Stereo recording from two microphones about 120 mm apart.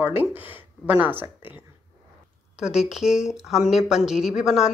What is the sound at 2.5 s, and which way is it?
A woman's voice, 5° right (ahead or behind).